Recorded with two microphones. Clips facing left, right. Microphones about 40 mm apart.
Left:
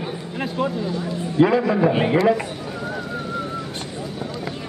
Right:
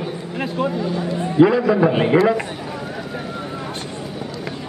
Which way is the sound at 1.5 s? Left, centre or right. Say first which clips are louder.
Right 2 dB; centre.